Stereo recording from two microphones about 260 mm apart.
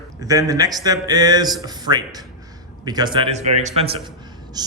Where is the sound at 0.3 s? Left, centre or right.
Centre.